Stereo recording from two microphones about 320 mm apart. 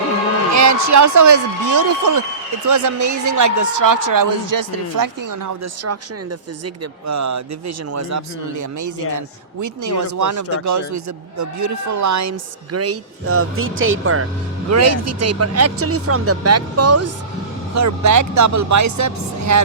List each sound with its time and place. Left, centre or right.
0.5 s speech: right
7.1 s speech: right
12.7 s speech: right
17.7 s speech: right